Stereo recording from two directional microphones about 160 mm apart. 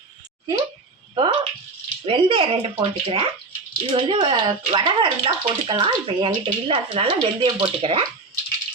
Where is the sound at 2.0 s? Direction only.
35° right (ahead or behind).